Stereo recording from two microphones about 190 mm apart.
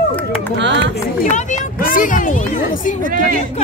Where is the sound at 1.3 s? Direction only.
45° left (ahead or behind).